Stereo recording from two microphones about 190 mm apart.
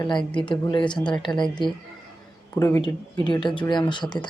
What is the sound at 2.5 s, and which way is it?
Speech, 15° left (ahead or behind).